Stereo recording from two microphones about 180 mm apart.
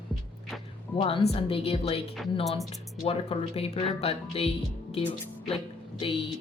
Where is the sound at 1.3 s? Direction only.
30° left (ahead or behind).